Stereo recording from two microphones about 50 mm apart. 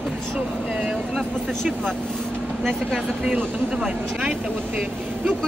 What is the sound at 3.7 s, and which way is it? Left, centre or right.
Speech, centre.